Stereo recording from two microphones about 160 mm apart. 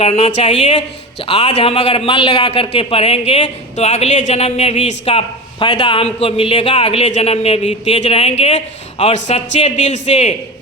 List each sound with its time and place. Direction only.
0.0 s speech: 40° left (ahead or behind)